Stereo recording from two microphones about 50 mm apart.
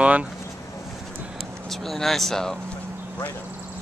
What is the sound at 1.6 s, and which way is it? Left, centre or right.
Speech, centre.